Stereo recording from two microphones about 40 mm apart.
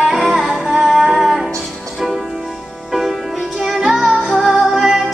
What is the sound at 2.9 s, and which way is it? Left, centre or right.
Music, centre.